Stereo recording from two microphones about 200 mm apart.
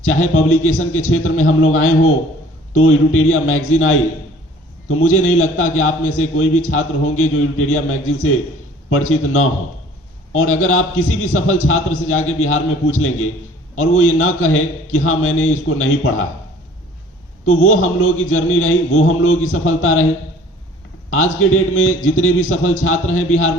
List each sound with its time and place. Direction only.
0.0 s a man's voice: 90° left
17.4 s a man's voice: 90° left
21.1 s a man's voice: 90° left